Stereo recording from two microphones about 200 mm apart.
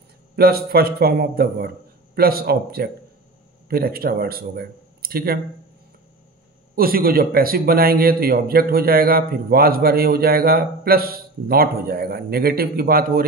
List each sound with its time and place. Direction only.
0.4 s a man's voice: 50° right (ahead or behind)
6.7 s a man's voice: 50° right (ahead or behind)